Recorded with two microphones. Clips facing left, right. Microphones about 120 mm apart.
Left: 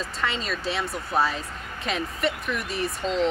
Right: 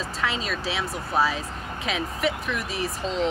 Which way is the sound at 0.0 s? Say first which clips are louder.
Right 1 dB; centre (ahead or behind).